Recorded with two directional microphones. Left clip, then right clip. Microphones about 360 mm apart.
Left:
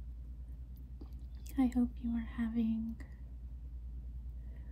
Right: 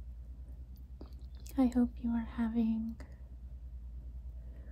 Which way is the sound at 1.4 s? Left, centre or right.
Centre.